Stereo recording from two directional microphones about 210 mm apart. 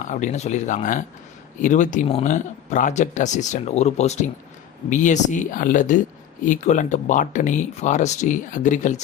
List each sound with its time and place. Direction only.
0.0 s speech: 35° left (ahead or behind)